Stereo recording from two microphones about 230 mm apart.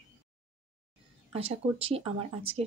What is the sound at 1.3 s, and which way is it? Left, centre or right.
Speech, right.